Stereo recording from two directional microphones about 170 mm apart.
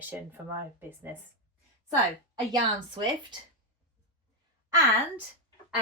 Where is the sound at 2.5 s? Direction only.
25° right (ahead or behind).